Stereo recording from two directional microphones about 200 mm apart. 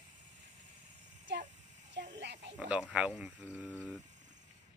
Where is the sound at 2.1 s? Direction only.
60° right (ahead or behind).